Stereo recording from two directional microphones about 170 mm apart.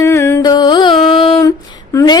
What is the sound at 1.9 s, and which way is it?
Speech, 25° left (ahead or behind).